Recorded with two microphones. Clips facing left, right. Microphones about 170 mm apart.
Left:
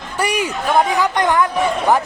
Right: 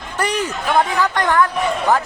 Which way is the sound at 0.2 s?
10° left (ahead or behind).